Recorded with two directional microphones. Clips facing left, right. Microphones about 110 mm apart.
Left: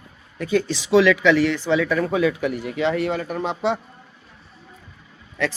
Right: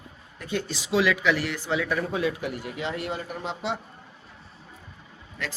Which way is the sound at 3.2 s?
65° left (ahead or behind).